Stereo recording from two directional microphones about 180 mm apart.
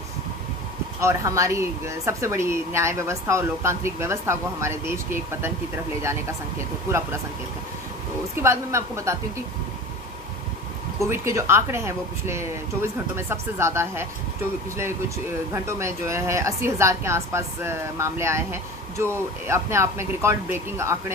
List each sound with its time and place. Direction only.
1.0 s speech: 15° right (ahead or behind)
8.4 s speech: 15° right (ahead or behind)
11.1 s speech: 15° right (ahead or behind)
15.5 s speech: 15° right (ahead or behind)